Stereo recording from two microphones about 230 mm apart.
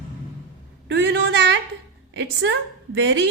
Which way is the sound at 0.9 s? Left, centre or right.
Right.